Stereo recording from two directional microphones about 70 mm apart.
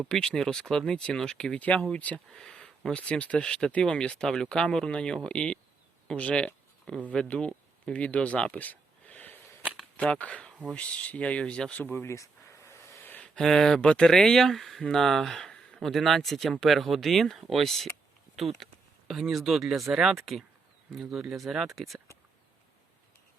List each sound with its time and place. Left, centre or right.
0.1 s speech: centre
1.5 s speech: left
2.1 s speech: centre
6.1 s a sound: centre
7.1 s speech: centre; by 12.0 s left
12.0 s a sound: left
13.1 s speech: centre